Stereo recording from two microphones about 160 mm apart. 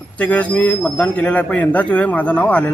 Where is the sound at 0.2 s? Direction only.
10° left (ahead or behind).